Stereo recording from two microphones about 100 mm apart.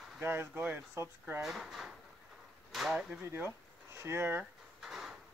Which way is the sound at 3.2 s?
25° right (ahead or behind).